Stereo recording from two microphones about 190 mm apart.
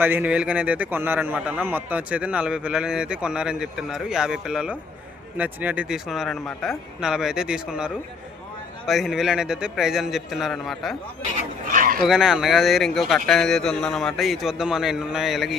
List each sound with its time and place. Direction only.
0.0 s a man's voice: 10° right (ahead or behind)
8.9 s a man's voice: centre (ahead or behind)
11.7 s a sound: 45° right (ahead or behind)
12.0 s a man's voice: centre (ahead or behind)